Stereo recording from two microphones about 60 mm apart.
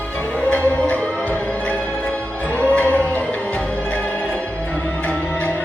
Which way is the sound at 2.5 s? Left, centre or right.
Left.